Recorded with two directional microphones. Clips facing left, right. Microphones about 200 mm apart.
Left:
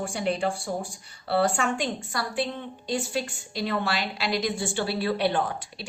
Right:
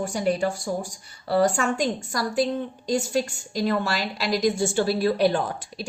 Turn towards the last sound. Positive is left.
turn(degrees=-40)  # may be behind; listen again after turning